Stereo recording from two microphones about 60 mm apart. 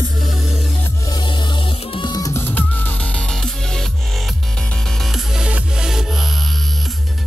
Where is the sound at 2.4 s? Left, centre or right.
Left.